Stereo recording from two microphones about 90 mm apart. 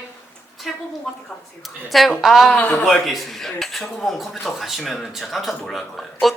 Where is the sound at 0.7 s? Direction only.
Centre (ahead or behind).